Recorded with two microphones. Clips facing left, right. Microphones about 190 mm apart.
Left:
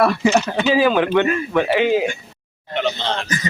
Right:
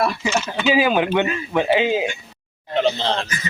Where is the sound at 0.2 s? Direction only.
35° left (ahead or behind).